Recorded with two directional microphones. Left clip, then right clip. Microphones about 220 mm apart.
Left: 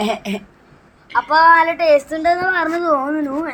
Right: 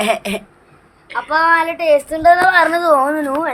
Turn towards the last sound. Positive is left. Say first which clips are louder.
# right 4 dB
turn(degrees=-15)  # may be behind; listen again after turning